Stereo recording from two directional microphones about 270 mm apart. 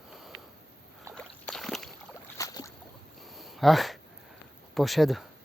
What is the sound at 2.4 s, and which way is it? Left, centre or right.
Boat, centre.